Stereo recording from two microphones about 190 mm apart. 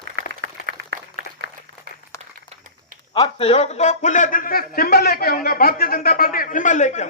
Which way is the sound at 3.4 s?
30° left (ahead or behind).